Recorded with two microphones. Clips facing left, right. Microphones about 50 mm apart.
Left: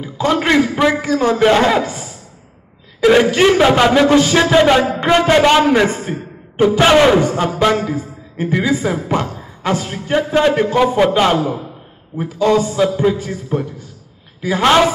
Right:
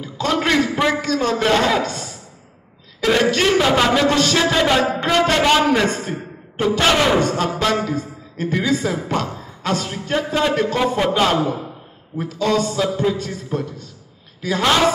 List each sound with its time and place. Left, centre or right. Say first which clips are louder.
0.0 s a man's voice: left 4 dB; centre
12.2 s a man's voice: left 5 dB; centre